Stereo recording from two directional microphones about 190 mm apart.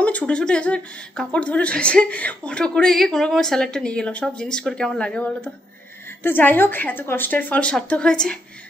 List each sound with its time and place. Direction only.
0.0 s a woman's voice: 5° left (ahead or behind)